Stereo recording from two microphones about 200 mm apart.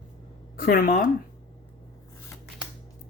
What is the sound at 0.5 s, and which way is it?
Speech, 45° left (ahead or behind).